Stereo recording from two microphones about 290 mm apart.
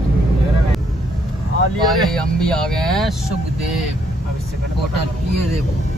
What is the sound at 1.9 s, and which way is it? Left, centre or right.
Speech, centre.